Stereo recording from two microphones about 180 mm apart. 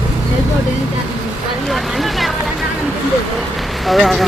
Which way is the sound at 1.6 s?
Centre (ahead or behind).